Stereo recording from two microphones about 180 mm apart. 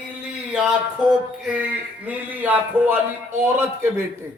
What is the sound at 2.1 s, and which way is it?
A man's voice, 10° right (ahead or behind).